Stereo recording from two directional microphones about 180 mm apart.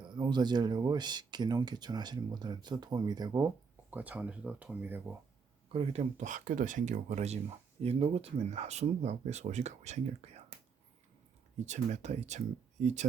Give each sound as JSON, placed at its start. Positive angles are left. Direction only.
{"t": 0.1, "sound": "speech", "side_deg": -25}
{"t": 5.7, "sound": "speech", "side_deg": -35}
{"t": 11.6, "sound": "speech", "side_deg": -40}